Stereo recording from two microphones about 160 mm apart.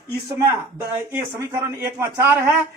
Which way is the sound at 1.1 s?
15° right (ahead or behind).